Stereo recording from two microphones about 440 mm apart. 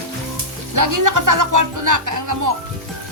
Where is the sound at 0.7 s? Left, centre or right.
Right.